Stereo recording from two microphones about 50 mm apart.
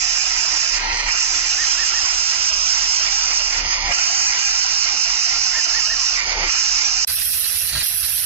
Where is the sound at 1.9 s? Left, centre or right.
Right.